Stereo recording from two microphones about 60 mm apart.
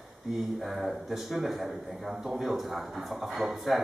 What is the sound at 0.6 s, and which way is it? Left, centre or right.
A man's voice, centre.